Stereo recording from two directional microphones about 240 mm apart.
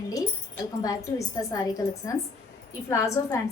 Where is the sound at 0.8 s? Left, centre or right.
Centre.